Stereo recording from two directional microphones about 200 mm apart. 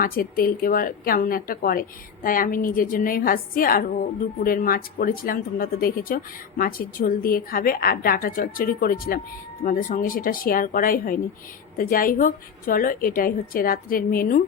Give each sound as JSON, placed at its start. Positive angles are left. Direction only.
{"t": 0.0, "sound": "a woman's voice", "side_deg": 45}